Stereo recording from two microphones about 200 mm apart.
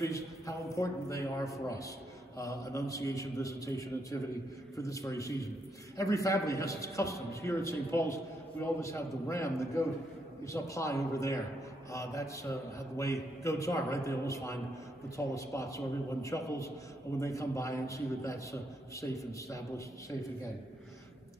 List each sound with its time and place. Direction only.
0.0 s a man's voice: 15° left (ahead or behind)